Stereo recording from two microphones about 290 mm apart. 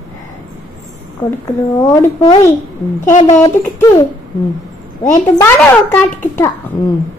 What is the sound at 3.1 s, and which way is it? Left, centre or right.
Speech, left.